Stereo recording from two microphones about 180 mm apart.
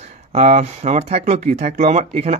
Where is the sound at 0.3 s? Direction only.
40° right (ahead or behind).